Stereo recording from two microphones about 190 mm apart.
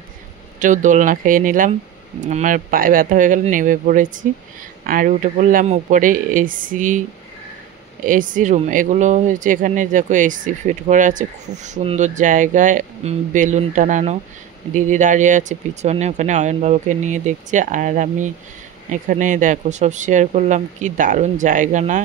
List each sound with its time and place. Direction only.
0.6 s speech: 40° right (ahead or behind)
8.0 s speech: 45° right (ahead or behind)